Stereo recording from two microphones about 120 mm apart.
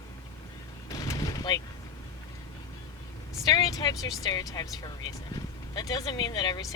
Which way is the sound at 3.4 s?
35° left (ahead or behind).